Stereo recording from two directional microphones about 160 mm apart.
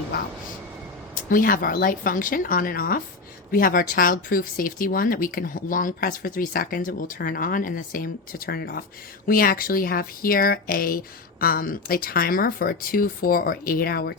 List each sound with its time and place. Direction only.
1.3 s speech: 60° left (ahead or behind); by 14.2 s 80° left